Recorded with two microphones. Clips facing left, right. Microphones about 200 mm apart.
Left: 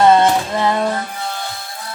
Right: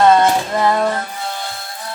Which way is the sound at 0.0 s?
20° left (ahead or behind).